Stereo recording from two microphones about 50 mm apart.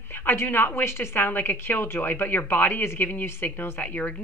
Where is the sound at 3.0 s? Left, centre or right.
Left.